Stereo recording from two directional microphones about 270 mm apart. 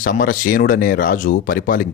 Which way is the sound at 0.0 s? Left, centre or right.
Left.